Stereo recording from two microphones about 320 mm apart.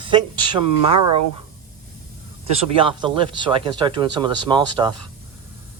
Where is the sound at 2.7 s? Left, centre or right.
Centre.